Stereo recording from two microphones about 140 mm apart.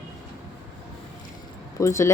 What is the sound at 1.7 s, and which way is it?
Speech, 20° left (ahead or behind).